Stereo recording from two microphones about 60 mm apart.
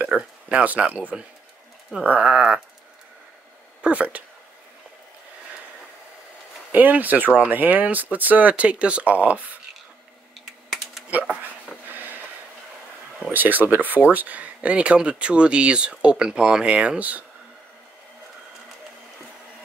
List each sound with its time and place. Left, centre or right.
0.1 s speech: centre
3.8 s speech: right
6.7 s speech: right
13.3 s speech: right